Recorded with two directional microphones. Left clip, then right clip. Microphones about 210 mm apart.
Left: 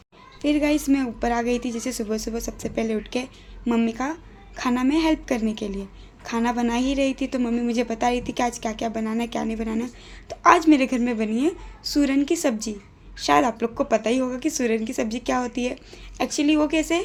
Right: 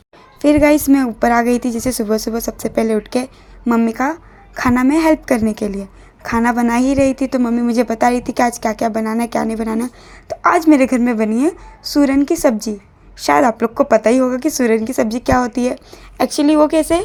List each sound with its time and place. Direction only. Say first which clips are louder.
0.4 s a woman's voice: right 10 dB; 35° right (ahead or behind)